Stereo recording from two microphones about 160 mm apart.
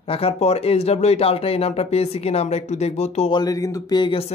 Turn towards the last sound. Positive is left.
turn(degrees=25)  # may be behind; listen again after turning